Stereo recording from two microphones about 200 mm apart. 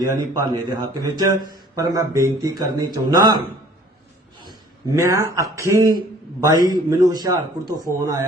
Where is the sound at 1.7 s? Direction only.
15° right (ahead or behind).